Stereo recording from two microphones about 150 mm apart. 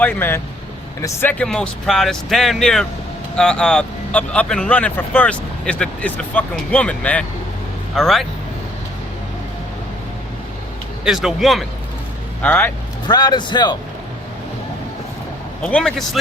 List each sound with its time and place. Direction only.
0.0 s speech: 15° left (ahead or behind)
11.0 s speech: 5° right (ahead or behind)
12.4 s speech: 15° left (ahead or behind)
13.1 s a man's voice: 25° left (ahead or behind)
15.6 s speech: 5° left (ahead or behind)